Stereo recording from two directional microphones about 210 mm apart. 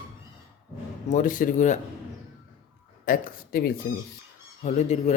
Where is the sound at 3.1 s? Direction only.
45° left (ahead or behind).